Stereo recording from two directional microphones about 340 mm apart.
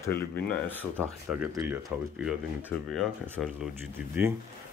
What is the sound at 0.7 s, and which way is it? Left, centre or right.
Speech, centre.